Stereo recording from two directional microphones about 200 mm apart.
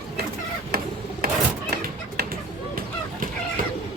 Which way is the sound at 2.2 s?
55° right (ahead or behind).